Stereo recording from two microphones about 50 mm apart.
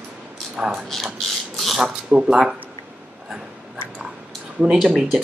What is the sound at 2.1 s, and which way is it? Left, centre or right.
Speech, centre.